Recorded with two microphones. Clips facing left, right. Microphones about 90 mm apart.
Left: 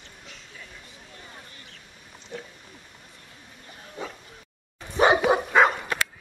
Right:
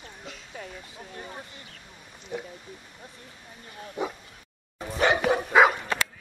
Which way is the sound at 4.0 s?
15° right (ahead or behind).